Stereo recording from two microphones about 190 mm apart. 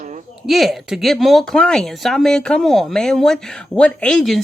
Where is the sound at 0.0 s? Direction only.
40° right (ahead or behind).